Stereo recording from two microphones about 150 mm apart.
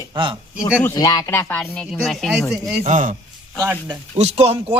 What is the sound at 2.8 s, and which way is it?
Speech, 55° right (ahead or behind).